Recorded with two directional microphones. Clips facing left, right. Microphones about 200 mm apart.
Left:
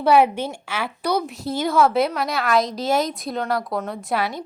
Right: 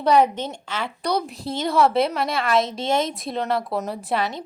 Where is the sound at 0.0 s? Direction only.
10° left (ahead or behind).